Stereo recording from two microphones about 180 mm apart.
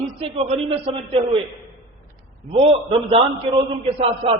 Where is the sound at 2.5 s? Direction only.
30° right (ahead or behind).